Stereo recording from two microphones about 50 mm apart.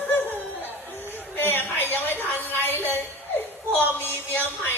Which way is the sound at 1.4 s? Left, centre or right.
Left.